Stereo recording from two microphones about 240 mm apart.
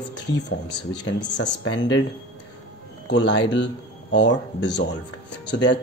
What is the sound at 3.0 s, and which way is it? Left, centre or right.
Speech, left.